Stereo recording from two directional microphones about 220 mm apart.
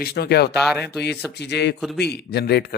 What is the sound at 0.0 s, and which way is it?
Speech, 45° left (ahead or behind).